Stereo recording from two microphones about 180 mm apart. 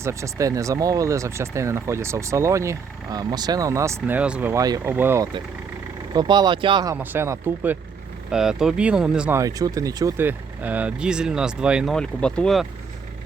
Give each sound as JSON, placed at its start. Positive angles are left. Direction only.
{"t": 0.0, "sound": "speech", "side_deg": -15}
{"t": 6.1, "sound": "speech", "side_deg": -25}
{"t": 6.9, "sound": "speech", "side_deg": -10}
{"t": 9.4, "sound": "speech", "side_deg": -20}